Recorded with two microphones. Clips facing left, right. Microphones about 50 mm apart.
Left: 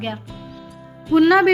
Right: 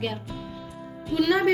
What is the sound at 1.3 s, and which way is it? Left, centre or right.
Speech, left.